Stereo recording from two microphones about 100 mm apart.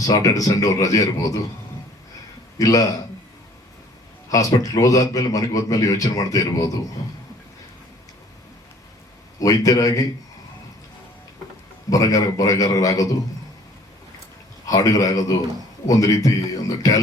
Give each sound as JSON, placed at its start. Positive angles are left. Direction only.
{"t": 0.0, "sound": "a man's voice", "side_deg": 35}
{"t": 2.6, "sound": "a man's voice", "side_deg": 35}
{"t": 4.3, "sound": "a man's voice", "side_deg": 35}
{"t": 9.4, "sound": "a man's voice", "side_deg": 35}
{"t": 11.9, "sound": "a man's voice", "side_deg": 35}
{"t": 14.7, "sound": "a man's voice", "side_deg": 35}